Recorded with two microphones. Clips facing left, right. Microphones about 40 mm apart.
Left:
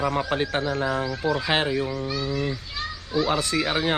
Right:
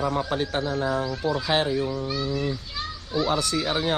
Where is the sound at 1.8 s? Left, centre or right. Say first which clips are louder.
Even; centre.